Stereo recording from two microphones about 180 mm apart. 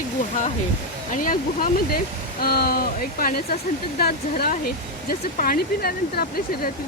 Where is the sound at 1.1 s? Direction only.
50° left (ahead or behind).